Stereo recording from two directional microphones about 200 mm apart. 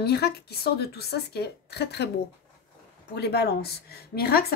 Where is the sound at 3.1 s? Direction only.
55° left (ahead or behind).